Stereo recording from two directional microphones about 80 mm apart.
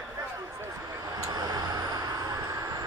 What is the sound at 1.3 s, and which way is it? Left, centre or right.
Vehicle, right.